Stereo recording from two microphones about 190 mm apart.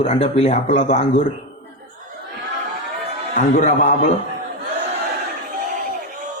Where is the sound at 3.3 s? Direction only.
40° left (ahead or behind).